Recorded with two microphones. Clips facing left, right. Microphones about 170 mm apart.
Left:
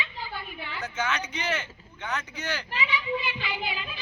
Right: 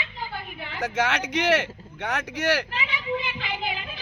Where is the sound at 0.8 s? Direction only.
85° right.